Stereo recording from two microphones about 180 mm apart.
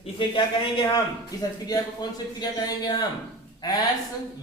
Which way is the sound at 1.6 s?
20° left (ahead or behind).